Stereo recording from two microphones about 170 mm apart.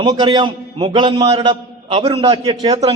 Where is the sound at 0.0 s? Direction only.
25° right (ahead or behind).